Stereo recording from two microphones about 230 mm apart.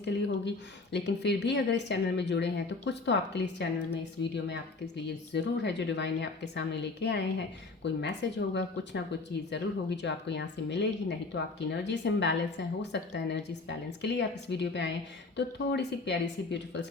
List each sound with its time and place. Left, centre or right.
0.0 s speech: left